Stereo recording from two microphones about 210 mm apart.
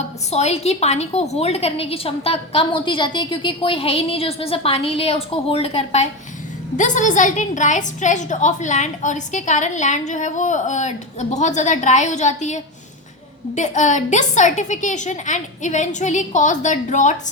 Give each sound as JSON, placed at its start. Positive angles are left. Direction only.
{"t": 0.3, "sound": "a woman's voice", "side_deg": 30}